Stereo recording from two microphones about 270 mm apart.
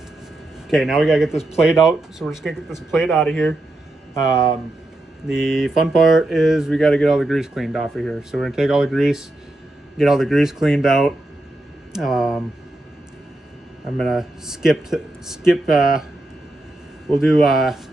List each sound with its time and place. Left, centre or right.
0.7 s speech: centre
5.2 s speech: centre
13.8 s speech: centre
17.2 s speech: centre